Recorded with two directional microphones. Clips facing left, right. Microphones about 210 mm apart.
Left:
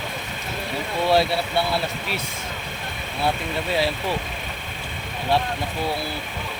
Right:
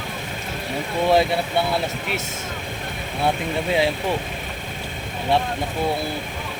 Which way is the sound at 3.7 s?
20° right (ahead or behind).